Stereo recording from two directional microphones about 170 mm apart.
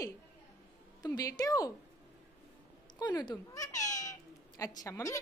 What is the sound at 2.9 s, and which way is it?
Speech, 25° left (ahead or behind).